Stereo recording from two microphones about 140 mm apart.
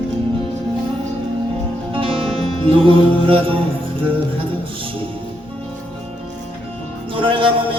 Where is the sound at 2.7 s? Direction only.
40° right (ahead or behind).